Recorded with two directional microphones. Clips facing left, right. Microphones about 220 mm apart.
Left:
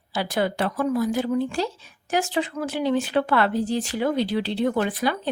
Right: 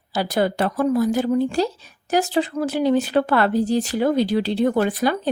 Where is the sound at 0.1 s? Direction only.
40° right (ahead or behind).